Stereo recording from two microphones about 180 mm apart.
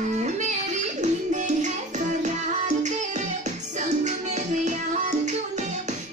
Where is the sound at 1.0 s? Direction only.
40° right (ahead or behind).